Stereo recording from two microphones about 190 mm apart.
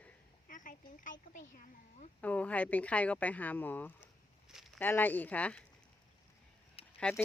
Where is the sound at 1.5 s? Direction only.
40° left (ahead or behind).